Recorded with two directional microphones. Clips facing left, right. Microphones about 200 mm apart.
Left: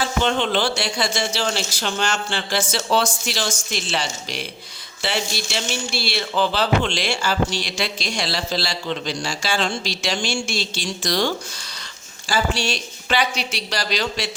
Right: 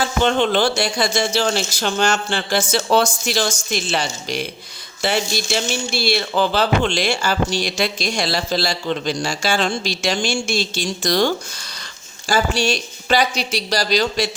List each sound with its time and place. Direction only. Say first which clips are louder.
0.2 s speech: right 4 dB; 50° right (ahead or behind)
12.3 s speech: right 4 dB; 45° right (ahead or behind)